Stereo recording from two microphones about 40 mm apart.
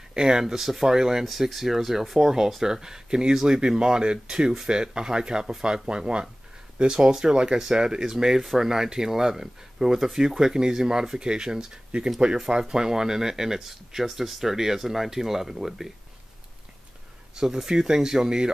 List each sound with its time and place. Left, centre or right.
0.1 s speech: centre
17.4 s speech: centre